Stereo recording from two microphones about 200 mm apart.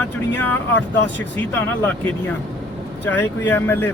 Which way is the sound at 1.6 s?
10° left (ahead or behind).